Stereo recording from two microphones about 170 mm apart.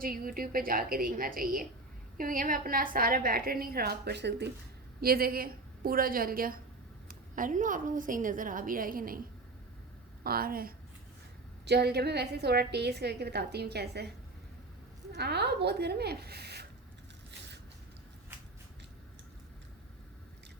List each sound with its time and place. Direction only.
0.0 s a woman's voice: 55° right (ahead or behind); by 4.5 s 85° right
4.9 s a woman's voice: 60° right (ahead or behind)
10.2 s a woman's voice: 60° right (ahead or behind)
11.6 s a woman's voice: 80° right
15.1 s a woman's voice: 75° right (ahead or behind)